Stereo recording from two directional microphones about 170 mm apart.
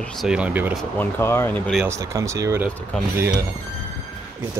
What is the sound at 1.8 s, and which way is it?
Speech, 15° right (ahead or behind).